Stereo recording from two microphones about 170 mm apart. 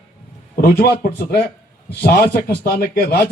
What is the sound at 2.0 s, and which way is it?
Speech, 65° left (ahead or behind).